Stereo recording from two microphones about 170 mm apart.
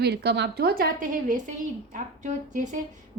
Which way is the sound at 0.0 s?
75° right (ahead or behind).